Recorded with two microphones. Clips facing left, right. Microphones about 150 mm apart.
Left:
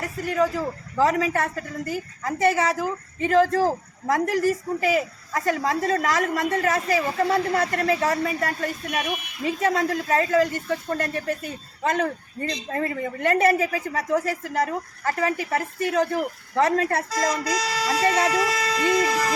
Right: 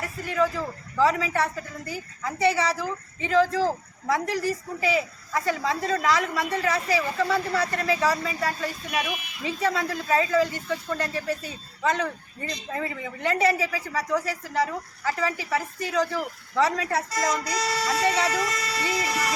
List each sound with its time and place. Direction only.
0.0 s speech: 40° left (ahead or behind)
17.1 s speech: 90° left